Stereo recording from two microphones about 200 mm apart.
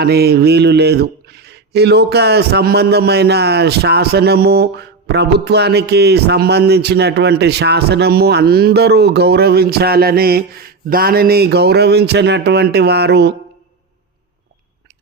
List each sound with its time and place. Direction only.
0.0 s speech: 55° right (ahead or behind)